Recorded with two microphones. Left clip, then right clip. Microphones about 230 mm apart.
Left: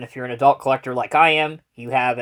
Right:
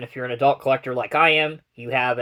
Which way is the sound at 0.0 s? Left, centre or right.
Left.